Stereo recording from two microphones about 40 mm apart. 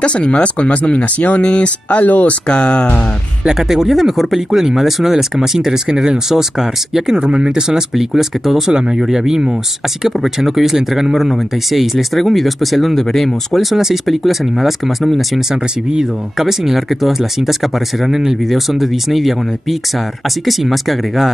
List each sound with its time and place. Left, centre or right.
0.0 s speech: left
1.9 s speech: left
2.4 s speech: left
3.4 s speech: centre
7.2 s speech: right; by 21.3 s centre